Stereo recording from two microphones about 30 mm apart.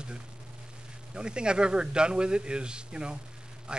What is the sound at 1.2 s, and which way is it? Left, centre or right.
A man's voice, right.